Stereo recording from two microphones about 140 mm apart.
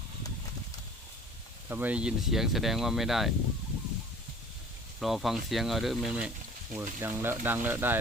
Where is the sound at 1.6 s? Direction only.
15° right (ahead or behind).